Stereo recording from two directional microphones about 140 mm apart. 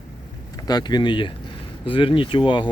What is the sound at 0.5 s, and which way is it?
Speech, 30° left (ahead or behind).